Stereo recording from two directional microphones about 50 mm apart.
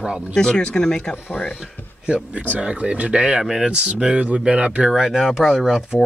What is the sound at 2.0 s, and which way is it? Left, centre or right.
Speech, right.